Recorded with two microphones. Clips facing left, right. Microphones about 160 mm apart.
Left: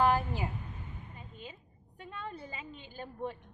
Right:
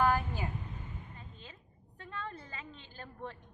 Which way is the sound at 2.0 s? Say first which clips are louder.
Left 1 dB; 15° left (ahead or behind).